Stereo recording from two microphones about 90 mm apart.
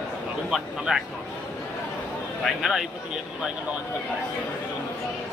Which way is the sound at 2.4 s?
Centre (ahead or behind).